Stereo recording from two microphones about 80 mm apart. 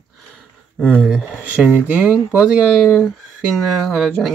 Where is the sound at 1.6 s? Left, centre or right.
Right.